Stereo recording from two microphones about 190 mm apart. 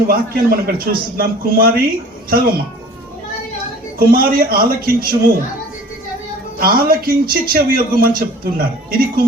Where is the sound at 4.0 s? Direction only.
50° right (ahead or behind).